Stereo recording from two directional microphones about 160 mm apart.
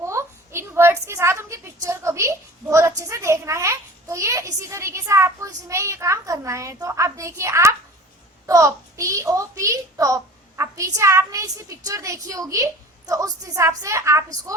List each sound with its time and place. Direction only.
0.0 s a woman's voice: 15° right (ahead or behind)